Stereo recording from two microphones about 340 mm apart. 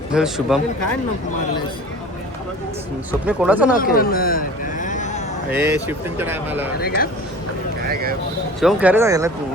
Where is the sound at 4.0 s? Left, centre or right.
Left.